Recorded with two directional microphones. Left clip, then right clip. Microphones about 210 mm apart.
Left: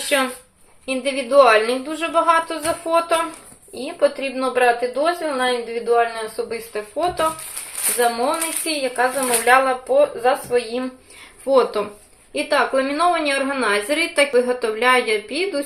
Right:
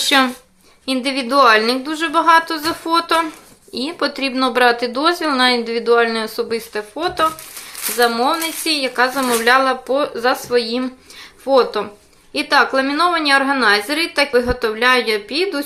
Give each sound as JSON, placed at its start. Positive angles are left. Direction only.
{"t": 0.0, "sound": "a woman's voice", "side_deg": -35}
{"t": 11.4, "sound": "a woman's voice", "side_deg": -15}